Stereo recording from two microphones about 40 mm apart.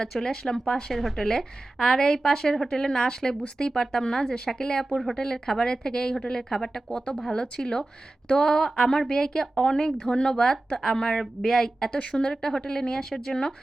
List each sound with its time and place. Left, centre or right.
0.1 s a woman's voice: centre